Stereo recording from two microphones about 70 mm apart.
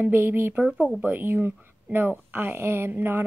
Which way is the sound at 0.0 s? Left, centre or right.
Right.